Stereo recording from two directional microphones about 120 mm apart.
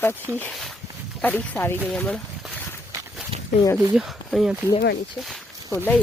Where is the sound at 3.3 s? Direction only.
50° right (ahead or behind).